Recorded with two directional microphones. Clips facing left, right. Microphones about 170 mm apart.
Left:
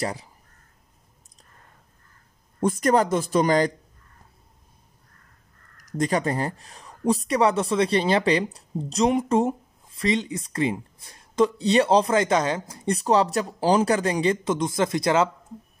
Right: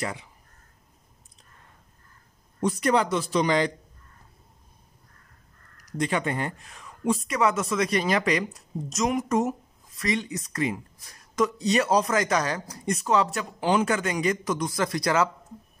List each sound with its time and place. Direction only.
0.0 s speech: 35° left (ahead or behind)
2.6 s speech: 45° left (ahead or behind)
5.9 s speech: 40° left (ahead or behind); by 15.2 s 25° left (ahead or behind)